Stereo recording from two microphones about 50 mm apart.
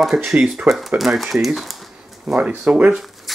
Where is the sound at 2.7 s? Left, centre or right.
Right.